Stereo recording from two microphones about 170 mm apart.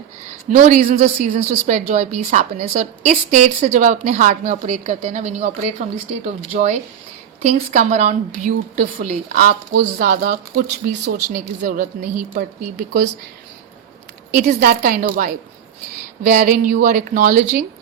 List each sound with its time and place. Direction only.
0.5 s a woman's voice: 50° right (ahead or behind)
9.4 s a woman's voice: 55° right (ahead or behind); by 13.1 s 70° right (ahead or behind)
14.4 s a woman's voice: 65° right (ahead or behind)